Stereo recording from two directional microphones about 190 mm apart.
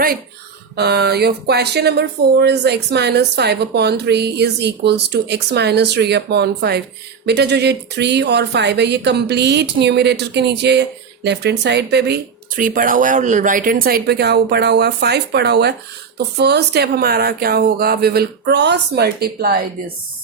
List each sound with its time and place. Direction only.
0.8 s speech: 60° right (ahead or behind)